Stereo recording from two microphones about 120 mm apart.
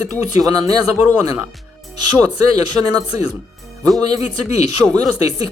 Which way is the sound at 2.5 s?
30° right (ahead or behind).